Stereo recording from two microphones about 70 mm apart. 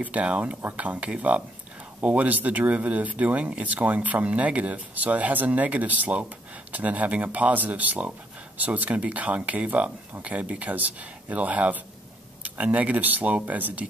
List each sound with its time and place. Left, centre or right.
0.0 s speech: right